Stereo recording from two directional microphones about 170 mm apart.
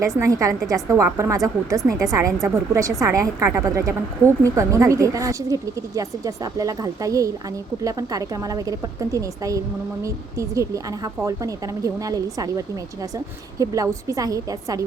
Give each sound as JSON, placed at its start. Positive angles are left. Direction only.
{"t": 0.2, "sound": "a woman's voice", "side_deg": -20}